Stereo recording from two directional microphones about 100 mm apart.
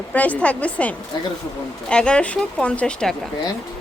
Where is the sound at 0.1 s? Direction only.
15° left (ahead or behind).